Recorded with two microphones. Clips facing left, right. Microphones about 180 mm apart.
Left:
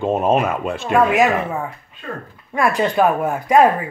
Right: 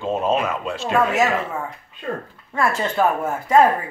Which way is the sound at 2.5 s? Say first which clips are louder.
Left 4 dB; 15° left (ahead or behind).